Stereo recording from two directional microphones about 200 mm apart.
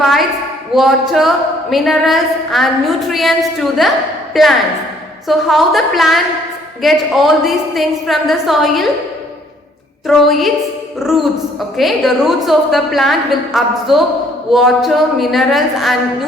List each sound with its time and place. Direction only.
0.0 s a sound: centre (ahead or behind)
0.8 s a woman's voice: centre (ahead or behind)
10.1 s a woman's voice: centre (ahead or behind)